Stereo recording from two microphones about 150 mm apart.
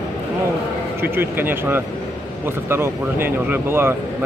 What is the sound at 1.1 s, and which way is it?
Speech, 15° right (ahead or behind).